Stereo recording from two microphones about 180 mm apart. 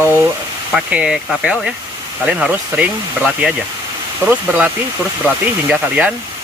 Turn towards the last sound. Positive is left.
turn(degrees=-5)  # may be behind; listen again after turning